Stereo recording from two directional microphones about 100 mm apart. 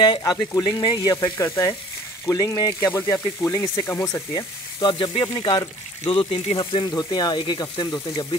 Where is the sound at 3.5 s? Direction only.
35° left (ahead or behind).